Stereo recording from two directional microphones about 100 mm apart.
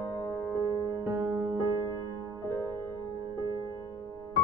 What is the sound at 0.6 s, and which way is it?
Music, 35° right (ahead or behind).